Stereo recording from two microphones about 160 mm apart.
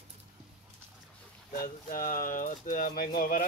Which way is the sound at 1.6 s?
60° left (ahead or behind).